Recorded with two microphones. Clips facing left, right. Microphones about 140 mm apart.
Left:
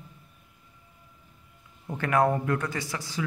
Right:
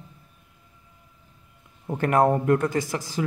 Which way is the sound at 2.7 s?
45° right (ahead or behind).